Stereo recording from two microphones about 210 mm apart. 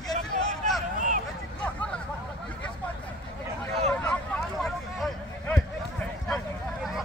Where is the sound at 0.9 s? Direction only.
40° right (ahead or behind).